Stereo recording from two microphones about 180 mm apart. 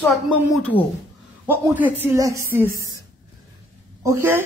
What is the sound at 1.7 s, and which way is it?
A woman's voice, 10° right (ahead or behind).